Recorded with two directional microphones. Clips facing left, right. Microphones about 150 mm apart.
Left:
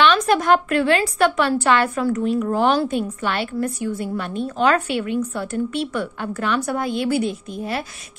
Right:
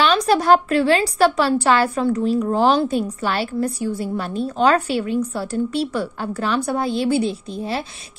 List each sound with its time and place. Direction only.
0.0 s a woman's voice: 35° right (ahead or behind)